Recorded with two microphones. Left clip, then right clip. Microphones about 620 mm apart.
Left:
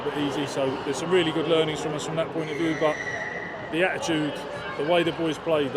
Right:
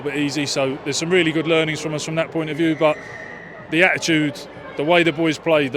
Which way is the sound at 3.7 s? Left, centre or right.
Right.